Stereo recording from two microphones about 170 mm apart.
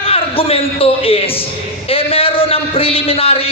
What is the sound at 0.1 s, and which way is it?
A man's voice, 35° left (ahead or behind).